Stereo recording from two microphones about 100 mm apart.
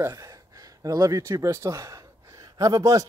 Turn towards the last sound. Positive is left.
turn(degrees=-35)  # may be behind; listen again after turning